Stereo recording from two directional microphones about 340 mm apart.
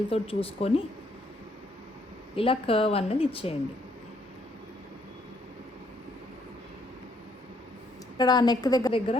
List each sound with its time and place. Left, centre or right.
0.1 s speech: centre
2.3 s speech: centre
8.2 s speech: centre